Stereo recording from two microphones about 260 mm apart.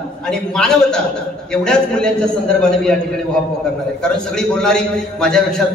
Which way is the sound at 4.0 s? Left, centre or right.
Centre.